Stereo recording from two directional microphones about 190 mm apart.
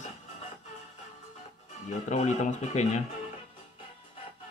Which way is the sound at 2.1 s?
40° left (ahead or behind).